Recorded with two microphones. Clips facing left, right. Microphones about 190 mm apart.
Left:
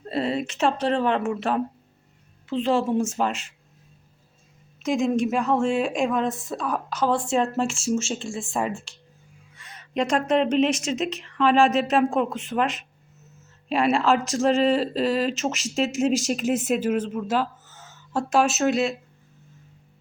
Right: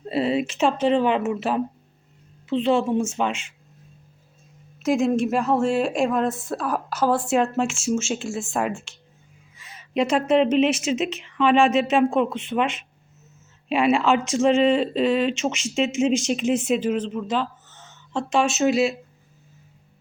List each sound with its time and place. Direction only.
0.0 s speech: 5° right (ahead or behind)
4.8 s speech: 5° right (ahead or behind)
8.7 s speech: 35° left (ahead or behind)
9.6 s speech: 5° right (ahead or behind)